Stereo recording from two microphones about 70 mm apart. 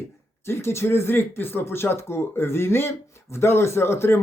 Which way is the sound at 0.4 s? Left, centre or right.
Left.